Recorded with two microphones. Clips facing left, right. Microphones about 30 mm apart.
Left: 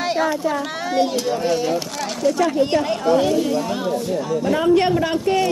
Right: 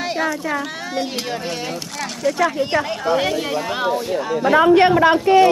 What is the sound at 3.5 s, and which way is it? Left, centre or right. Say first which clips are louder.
A woman's voice: right 1 dB; right.